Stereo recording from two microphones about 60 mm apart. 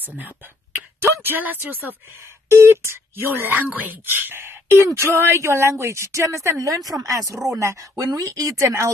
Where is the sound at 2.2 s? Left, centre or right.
Right.